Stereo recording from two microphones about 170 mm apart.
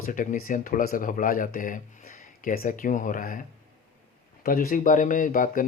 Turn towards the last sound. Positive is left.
turn(degrees=50)  # may be behind; listen again after turning